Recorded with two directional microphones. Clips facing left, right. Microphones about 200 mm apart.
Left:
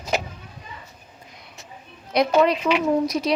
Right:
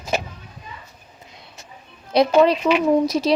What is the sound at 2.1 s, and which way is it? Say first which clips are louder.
A woman's voice: right 3 dB; 30° right (ahead or behind).